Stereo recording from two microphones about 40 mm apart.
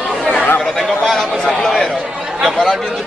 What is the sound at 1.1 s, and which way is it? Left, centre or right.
A man's voice, centre.